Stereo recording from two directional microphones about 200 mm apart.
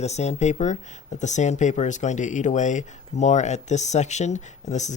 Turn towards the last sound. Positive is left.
turn(degrees=35)  # may be behind; listen again after turning